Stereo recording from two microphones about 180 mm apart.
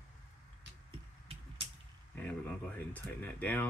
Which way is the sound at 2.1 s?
10° left (ahead or behind).